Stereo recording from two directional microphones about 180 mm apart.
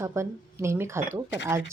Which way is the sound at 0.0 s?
15° right (ahead or behind).